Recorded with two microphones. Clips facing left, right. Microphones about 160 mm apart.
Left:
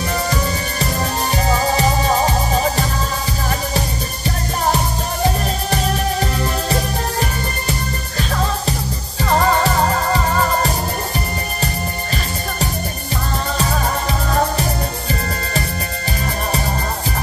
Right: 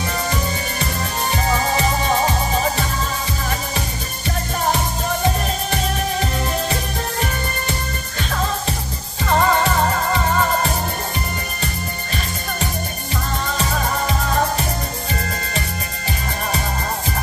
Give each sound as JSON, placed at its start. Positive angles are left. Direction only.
{"t": 1.3, "sound": "music", "side_deg": 35}
{"t": 6.7, "sound": "music", "side_deg": 35}
{"t": 9.3, "sound": "music", "side_deg": 35}